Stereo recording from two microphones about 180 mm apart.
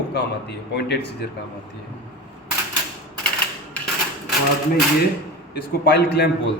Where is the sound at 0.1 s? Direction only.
70° left (ahead or behind).